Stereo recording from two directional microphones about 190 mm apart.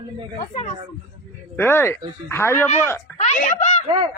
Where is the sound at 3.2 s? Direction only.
35° left (ahead or behind).